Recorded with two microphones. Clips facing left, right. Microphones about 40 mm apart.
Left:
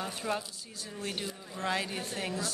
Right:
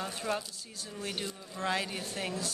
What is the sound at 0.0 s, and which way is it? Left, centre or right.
Speech, centre.